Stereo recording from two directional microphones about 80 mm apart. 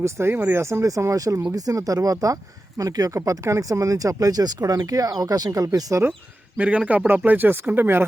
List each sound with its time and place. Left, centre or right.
0.0 s speech: right
6.6 s a man's voice: centre